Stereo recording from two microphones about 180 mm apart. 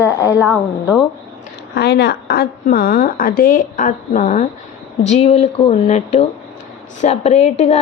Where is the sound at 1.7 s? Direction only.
70° left (ahead or behind); by 7.8 s 35° left (ahead or behind).